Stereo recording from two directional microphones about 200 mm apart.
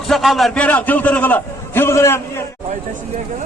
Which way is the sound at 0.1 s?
Centre (ahead or behind).